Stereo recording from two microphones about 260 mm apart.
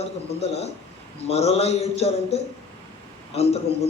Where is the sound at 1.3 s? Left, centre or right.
Left.